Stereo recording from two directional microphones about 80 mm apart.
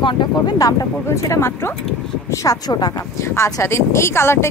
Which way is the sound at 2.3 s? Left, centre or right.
Left.